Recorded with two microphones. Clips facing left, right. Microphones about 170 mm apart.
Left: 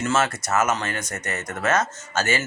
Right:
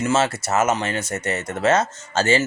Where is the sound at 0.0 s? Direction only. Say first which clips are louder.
Right 3 dB; 25° right (ahead or behind).